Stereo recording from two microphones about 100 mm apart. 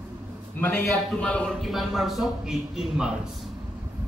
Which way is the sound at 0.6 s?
20° left (ahead or behind).